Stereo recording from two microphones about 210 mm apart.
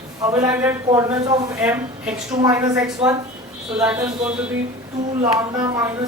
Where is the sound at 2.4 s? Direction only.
15° right (ahead or behind).